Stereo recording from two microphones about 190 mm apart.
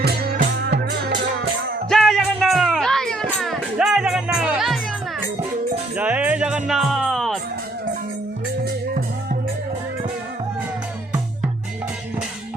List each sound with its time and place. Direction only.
0.0 s music: 55° right (ahead or behind)
1.9 s music: centre (ahead or behind)
6.0 s music: 5° right (ahead or behind)
8.6 s music: 50° right (ahead or behind)